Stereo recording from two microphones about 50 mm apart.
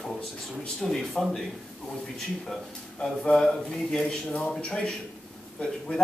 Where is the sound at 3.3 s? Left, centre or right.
Centre.